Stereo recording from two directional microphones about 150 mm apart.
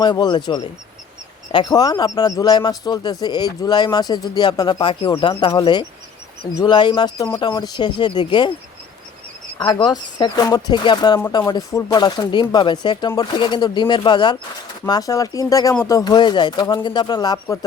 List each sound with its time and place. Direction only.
0.0 s a man's voice: 30° left (ahead or behind)
9.6 s a man's voice: 30° left (ahead or behind)